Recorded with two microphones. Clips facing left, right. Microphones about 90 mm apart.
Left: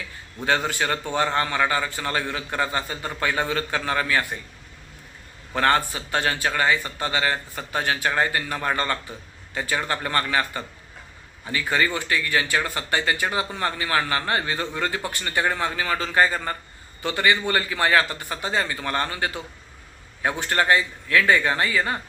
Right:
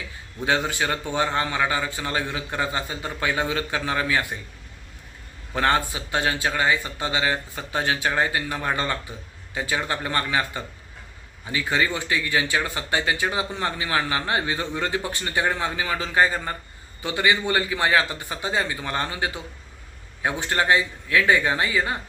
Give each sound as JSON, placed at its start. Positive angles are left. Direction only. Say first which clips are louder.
{"t": 0.4, "sound": "a man's voice", "louder": "even", "side_deg": -15}
{"t": 5.5, "sound": "a man's voice", "louder": "left 1 dB", "side_deg": -20}